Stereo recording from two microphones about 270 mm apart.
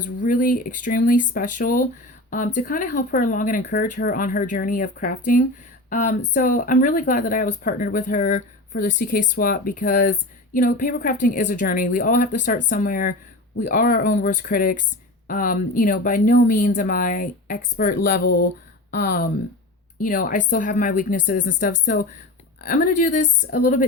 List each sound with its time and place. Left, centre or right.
0.2 s speech: left
22.6 s speech: left